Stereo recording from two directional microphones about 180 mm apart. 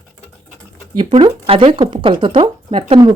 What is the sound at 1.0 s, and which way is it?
Speech, 25° right (ahead or behind).